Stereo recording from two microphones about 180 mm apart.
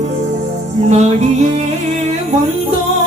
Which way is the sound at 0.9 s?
40° right (ahead or behind).